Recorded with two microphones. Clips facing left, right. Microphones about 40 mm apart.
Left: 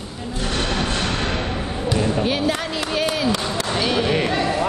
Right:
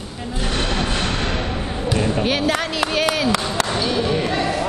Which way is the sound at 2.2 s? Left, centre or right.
Right.